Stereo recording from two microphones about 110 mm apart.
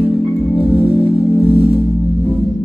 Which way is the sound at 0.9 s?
60° right (ahead or behind).